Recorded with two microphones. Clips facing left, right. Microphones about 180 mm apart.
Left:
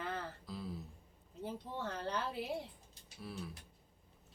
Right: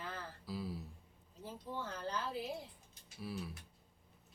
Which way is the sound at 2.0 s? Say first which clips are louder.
Left 3 dB; 60° left (ahead or behind).